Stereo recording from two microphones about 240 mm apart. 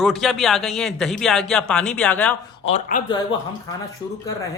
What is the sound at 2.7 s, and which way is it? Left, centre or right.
Speech, left.